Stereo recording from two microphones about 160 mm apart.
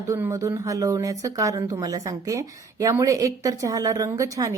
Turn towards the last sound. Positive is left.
turn(degrees=-20)  # may be behind; listen again after turning